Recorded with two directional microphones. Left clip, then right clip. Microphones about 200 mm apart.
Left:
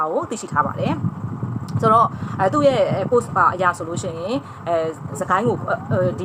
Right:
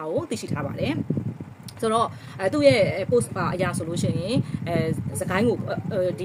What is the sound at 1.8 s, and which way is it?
Speech, 25° right (ahead or behind).